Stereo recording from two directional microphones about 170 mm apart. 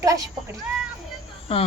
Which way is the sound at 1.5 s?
35° left (ahead or behind).